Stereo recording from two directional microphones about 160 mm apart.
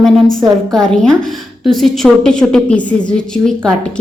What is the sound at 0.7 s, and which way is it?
A woman's voice, 5° left (ahead or behind).